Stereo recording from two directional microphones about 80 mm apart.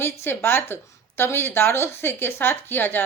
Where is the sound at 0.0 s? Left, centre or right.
Left.